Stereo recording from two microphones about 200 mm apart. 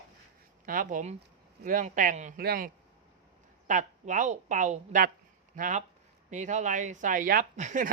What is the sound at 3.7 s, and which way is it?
A woman's voice, 40° right (ahead or behind).